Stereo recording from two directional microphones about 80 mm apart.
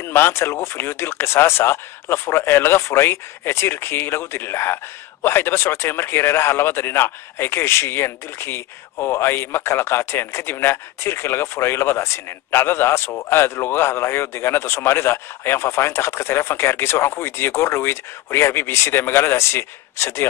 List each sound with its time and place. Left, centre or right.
0.0 s speech: left